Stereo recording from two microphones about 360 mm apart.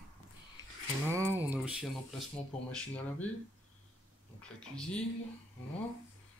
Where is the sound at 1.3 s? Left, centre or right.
Centre.